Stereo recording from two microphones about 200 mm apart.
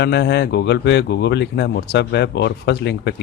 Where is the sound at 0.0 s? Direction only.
55° left (ahead or behind).